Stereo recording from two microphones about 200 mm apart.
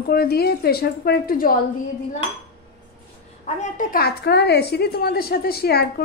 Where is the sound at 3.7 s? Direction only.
50° left (ahead or behind).